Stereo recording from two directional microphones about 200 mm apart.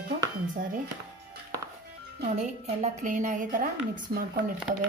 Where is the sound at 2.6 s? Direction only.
40° right (ahead or behind).